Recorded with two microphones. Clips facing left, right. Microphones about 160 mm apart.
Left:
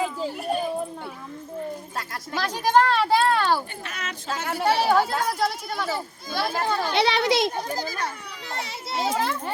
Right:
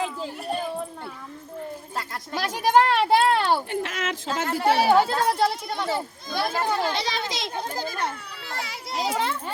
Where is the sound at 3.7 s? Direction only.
90° right.